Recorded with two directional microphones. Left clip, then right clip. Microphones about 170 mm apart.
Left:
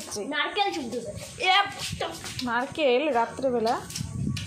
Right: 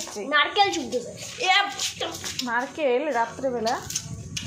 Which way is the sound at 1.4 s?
30° left (ahead or behind).